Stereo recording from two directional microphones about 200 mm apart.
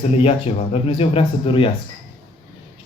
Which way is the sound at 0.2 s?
30° left (ahead or behind).